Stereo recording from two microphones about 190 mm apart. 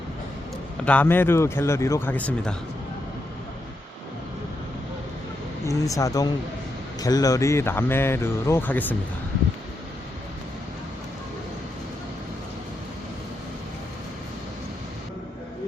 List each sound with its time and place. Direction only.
0.9 s speech: 10° left (ahead or behind)
5.6 s speech: 15° left (ahead or behind)